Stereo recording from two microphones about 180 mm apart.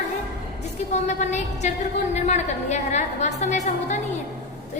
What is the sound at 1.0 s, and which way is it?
A woman's voice, 40° left (ahead or behind).